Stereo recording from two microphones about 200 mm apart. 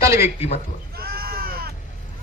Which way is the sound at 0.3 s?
30° left (ahead or behind).